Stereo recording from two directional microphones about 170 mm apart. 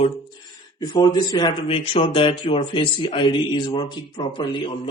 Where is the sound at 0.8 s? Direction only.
25° left (ahead or behind).